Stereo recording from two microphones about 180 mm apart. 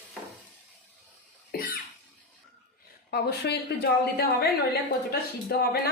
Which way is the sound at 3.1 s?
60° left (ahead or behind).